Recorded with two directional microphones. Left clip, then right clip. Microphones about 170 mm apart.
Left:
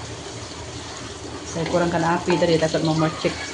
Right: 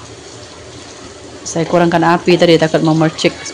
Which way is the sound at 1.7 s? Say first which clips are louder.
Right 9 dB; 70° right (ahead or behind).